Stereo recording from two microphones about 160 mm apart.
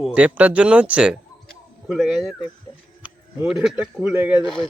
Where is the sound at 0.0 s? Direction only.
10° right (ahead or behind).